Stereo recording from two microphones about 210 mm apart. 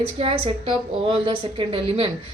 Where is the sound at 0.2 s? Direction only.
25° right (ahead or behind).